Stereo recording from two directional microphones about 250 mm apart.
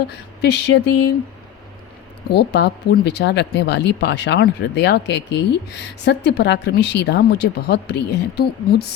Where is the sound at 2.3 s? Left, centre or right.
Left.